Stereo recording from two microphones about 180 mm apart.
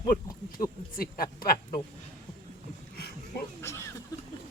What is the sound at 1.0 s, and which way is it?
Speech, 55° left (ahead or behind).